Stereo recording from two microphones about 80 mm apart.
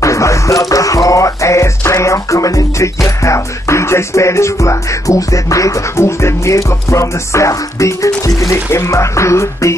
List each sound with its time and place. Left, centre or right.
0.0 s music: left